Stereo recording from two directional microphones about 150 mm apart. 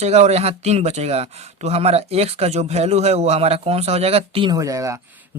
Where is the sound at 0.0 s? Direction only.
45° right (ahead or behind).